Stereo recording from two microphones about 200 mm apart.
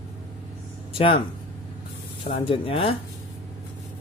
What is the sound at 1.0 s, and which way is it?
Speech, 25° left (ahead or behind).